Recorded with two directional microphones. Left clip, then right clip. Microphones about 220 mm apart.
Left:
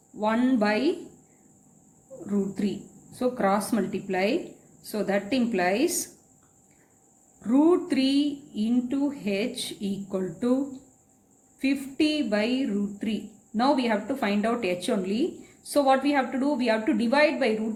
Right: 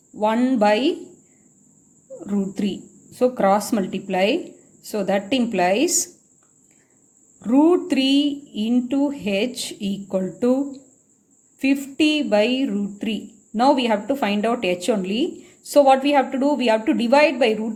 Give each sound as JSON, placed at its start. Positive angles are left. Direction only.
{"t": 0.2, "sound": "speech", "side_deg": -35}
{"t": 2.2, "sound": "speech", "side_deg": -40}
{"t": 7.4, "sound": "speech", "side_deg": -35}